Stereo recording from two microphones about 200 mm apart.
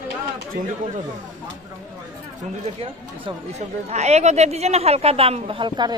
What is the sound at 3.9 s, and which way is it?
Speech, 35° right (ahead or behind).